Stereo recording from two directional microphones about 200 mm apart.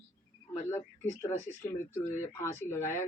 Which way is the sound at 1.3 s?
35° left (ahead or behind).